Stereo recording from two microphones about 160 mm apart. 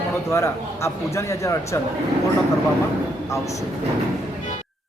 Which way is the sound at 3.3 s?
20° left (ahead or behind).